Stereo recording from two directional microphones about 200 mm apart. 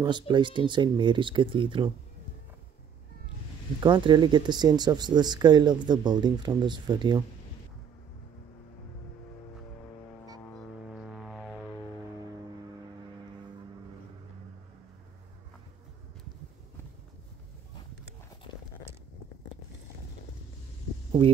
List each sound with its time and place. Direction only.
0.0 s speech: 20° right (ahead or behind)
3.8 s speech: 25° right (ahead or behind)
10.9 s music: centre (ahead or behind)